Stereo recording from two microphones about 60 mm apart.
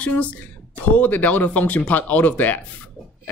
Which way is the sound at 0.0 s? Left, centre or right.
Left.